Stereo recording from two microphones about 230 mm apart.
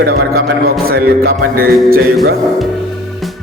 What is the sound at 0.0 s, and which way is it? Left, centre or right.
Speech, right.